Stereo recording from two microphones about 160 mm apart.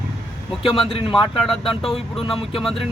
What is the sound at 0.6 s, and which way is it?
Speech, 35° left (ahead or behind).